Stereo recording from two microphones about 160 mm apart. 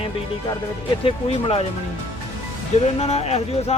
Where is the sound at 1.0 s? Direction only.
35° left (ahead or behind).